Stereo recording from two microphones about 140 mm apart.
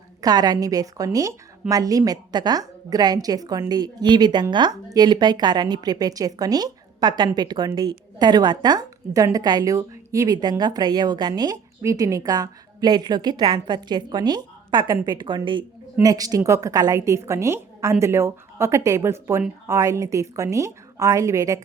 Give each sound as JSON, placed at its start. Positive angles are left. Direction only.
{"t": 0.2, "sound": "a woman's voice", "side_deg": -30}